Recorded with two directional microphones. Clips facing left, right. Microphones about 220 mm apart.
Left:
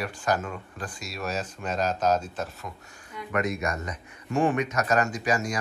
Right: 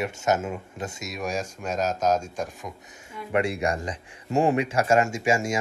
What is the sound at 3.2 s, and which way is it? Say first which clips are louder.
Speech: right 3 dB; 30° right (ahead or behind).